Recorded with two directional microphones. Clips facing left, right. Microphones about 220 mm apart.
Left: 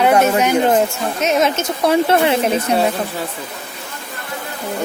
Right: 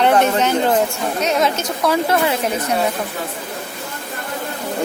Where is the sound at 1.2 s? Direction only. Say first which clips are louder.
Left 3 dB; 20° left (ahead or behind).